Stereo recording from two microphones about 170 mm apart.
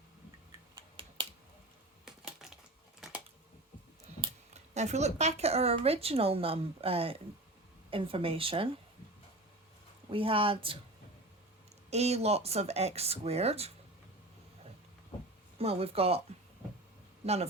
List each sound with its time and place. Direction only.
1.0 s finger snapping: 30° right (ahead or behind)
2.0 s typing: centre (ahead or behind)
4.5 s speech: 40° right (ahead or behind)
10.1 s speech: 30° right (ahead or behind)
11.9 s speech: 40° right (ahead or behind)
15.5 s speech: 35° right (ahead or behind)
17.2 s speech: 40° right (ahead or behind)